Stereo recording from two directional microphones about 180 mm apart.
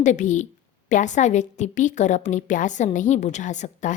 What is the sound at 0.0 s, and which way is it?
A woman's voice, 40° left (ahead or behind).